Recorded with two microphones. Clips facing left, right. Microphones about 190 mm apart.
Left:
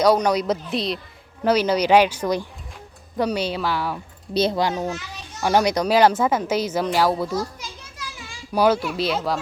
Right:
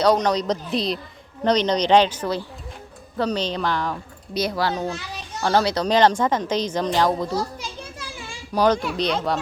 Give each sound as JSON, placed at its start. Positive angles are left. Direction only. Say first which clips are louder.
{"t": 0.0, "sound": "speech", "louder": "left 1 dB", "side_deg": 10}
{"t": 4.4, "sound": "a child's voice", "louder": "left 3 dB", "side_deg": 25}
{"t": 4.7, "sound": "speech", "louder": "even", "side_deg": 10}
{"t": 7.3, "sound": "children playing", "louder": "right 1 dB", "side_deg": -30}
{"t": 8.5, "sound": "a child's voice", "louder": "left 1 dB", "side_deg": 10}